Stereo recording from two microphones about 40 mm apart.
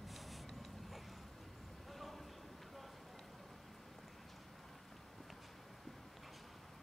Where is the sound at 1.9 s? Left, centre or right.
Centre.